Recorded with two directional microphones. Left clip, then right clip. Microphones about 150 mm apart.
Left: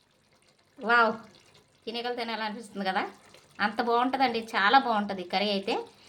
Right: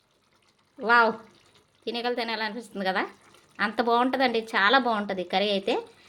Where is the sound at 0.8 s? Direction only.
40° right (ahead or behind).